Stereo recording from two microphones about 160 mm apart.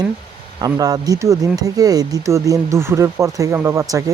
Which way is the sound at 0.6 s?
25° right (ahead or behind).